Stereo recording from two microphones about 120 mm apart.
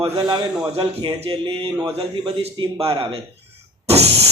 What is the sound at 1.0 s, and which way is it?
A man's voice, 55° right (ahead or behind).